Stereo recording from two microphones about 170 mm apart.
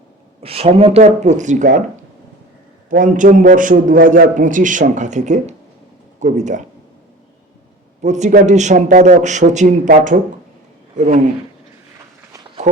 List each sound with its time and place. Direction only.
0.4 s a man's voice: 35° right (ahead or behind)
2.9 s a man's voice: 50° right (ahead or behind)
8.0 s a man's voice: 45° right (ahead or behind)
12.6 s speech: 45° right (ahead or behind)